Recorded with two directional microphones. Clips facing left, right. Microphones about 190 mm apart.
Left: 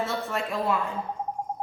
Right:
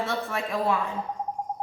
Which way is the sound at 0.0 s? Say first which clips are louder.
Even; centre (ahead or behind).